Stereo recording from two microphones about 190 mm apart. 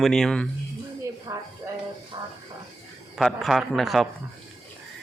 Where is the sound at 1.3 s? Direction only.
15° right (ahead or behind).